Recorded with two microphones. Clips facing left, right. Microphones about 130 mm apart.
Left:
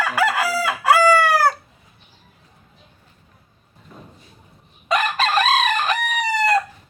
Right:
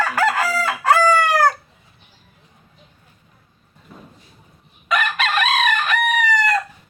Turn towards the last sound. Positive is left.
turn(degrees=30)  # may be behind; listen again after turning